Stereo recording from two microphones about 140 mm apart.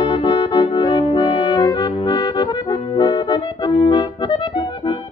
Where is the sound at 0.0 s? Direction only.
30° left (ahead or behind).